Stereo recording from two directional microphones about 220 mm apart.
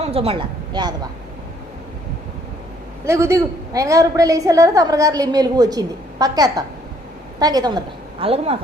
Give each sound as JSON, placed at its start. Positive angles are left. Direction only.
{"t": 0.0, "sound": "a woman's voice", "side_deg": -25}
{"t": 3.0, "sound": "a woman's voice", "side_deg": -10}